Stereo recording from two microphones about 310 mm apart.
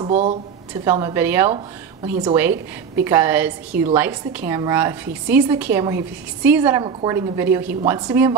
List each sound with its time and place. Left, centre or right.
0.0 s a woman's voice: right
0.8 s a woman's voice: centre